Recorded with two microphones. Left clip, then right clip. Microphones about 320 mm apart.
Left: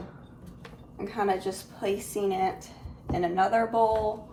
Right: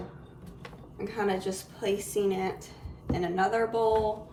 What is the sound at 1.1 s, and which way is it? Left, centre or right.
A woman's voice, centre.